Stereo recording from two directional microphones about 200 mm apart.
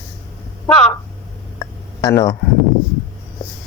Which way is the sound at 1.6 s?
15° left (ahead or behind).